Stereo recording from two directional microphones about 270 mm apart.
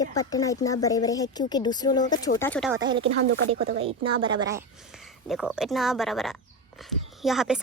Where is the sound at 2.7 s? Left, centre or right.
Centre.